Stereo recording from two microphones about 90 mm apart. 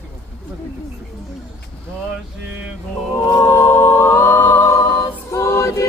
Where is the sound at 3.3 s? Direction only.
25° left (ahead or behind).